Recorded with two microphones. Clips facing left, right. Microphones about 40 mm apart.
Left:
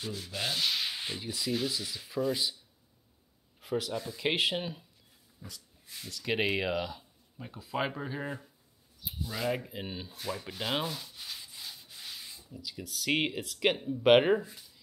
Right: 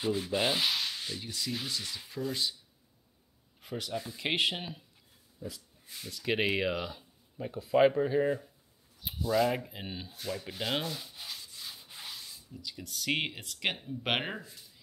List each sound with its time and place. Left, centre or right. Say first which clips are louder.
0.0 s sanding: right 7 dB; right
1.2 s speech: left 7 dB; centre
3.6 s speech: left 4 dB; centre
6.0 s speech: even; centre
11.3 s wood: left 1 dB; centre
12.4 s speech: left 2 dB; centre